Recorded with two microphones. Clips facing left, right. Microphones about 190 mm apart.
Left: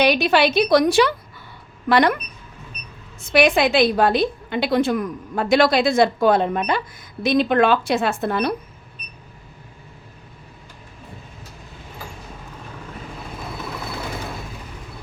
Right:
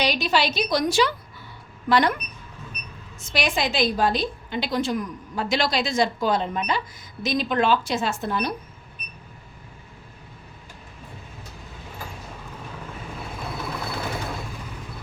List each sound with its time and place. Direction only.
0.0 s a woman's voice: 55° left (ahead or behind)
3.2 s a woman's voice: 60° left (ahead or behind)